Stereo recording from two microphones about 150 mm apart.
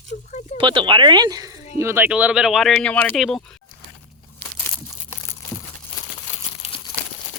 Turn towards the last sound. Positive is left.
turn(degrees=45)  # may be behind; listen again after turning